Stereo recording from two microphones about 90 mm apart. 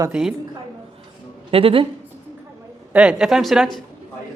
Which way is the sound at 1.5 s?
85° right.